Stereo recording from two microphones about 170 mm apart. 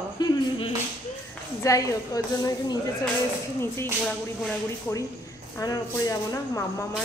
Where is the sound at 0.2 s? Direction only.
25° left (ahead or behind).